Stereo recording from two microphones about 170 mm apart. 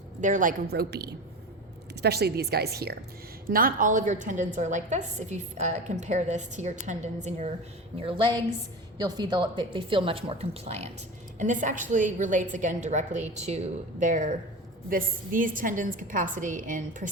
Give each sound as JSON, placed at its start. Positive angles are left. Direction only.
{"t": 0.2, "sound": "a woman's voice", "side_deg": -50}
{"t": 7.9, "sound": "a woman's voice", "side_deg": -30}